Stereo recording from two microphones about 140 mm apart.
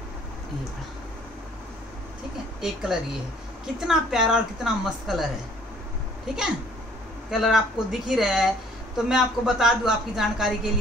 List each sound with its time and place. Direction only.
2.6 s a woman's voice: 5° right (ahead or behind)